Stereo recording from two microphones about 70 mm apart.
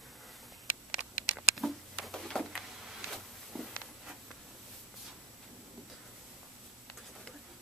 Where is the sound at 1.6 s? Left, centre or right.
Centre.